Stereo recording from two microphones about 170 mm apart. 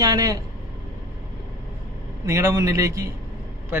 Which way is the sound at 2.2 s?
20° right (ahead or behind).